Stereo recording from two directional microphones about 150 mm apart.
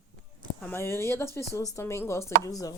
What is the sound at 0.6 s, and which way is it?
Speech, 15° left (ahead or behind).